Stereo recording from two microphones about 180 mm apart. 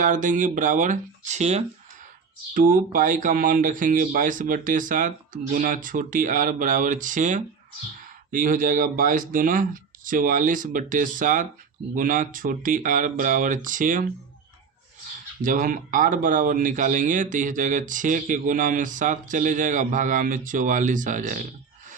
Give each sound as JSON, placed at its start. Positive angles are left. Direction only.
{"t": 0.0, "sound": "speech", "side_deg": -45}
{"t": 15.4, "sound": "speech", "side_deg": -50}